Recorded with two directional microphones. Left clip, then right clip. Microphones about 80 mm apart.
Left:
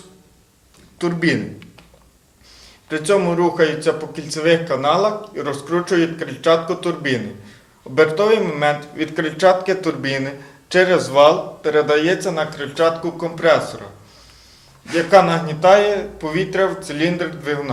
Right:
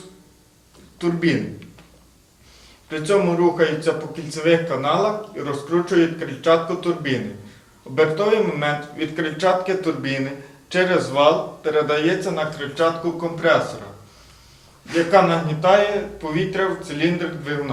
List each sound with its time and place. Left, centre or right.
0.9 s a man's voice: left
2.9 s a man's voice: left
14.8 s a man's voice: left